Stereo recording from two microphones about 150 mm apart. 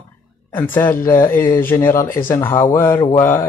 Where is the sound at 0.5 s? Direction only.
15° left (ahead or behind).